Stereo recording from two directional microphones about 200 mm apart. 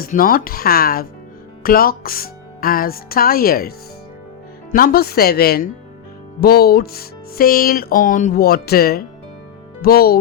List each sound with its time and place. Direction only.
0.0 s speech: 45° left (ahead or behind)